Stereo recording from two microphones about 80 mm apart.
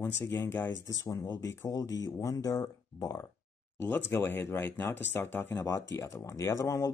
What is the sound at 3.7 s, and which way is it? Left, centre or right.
Speech, left.